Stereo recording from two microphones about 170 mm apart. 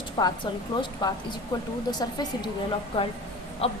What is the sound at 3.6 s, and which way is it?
Speech, 30° left (ahead or behind).